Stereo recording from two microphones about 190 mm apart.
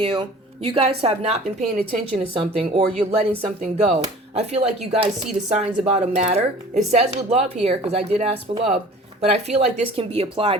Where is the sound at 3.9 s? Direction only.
35° right (ahead or behind).